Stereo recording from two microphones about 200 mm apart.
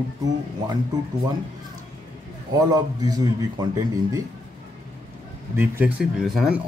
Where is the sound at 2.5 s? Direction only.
20° right (ahead or behind).